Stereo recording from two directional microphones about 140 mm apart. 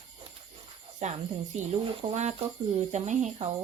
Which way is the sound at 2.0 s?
45° right (ahead or behind).